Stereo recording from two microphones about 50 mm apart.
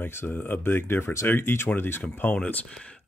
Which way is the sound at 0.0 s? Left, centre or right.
Left.